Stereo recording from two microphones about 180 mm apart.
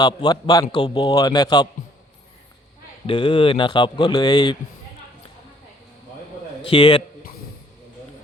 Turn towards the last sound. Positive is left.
turn(degrees=25)  # may be behind; listen again after turning